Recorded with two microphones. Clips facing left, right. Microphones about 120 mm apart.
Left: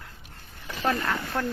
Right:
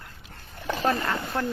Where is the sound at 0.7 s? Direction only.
40° right (ahead or behind).